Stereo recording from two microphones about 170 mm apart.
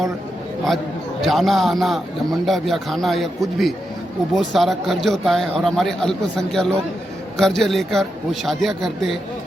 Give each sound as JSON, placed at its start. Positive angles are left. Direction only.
{"t": 1.2, "sound": "a man's voice", "side_deg": 0}